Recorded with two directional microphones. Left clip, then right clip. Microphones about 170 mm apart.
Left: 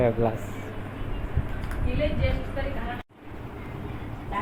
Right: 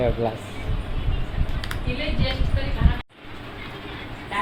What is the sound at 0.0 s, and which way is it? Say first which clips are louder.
Speech: even; centre (ahead or behind).